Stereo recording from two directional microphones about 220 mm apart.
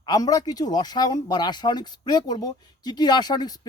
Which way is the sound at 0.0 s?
15° left (ahead or behind).